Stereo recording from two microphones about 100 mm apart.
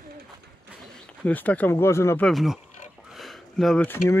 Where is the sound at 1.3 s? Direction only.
15° left (ahead or behind).